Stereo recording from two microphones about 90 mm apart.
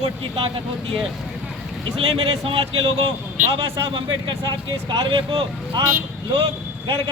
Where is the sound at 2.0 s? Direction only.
75° right (ahead or behind).